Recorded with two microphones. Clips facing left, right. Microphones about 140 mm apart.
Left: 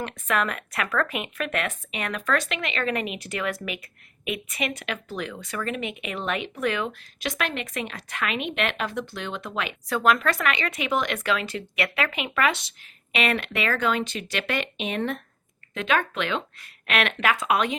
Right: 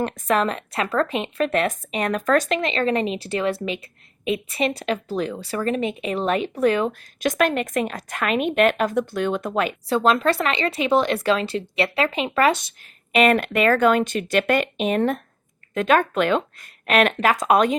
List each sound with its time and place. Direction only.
0.0 s a woman's voice: 35° right (ahead or behind)
9.9 s a woman's voice: 30° right (ahead or behind)